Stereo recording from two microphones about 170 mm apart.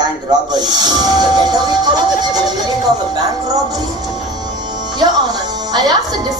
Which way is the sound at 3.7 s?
25° right (ahead or behind).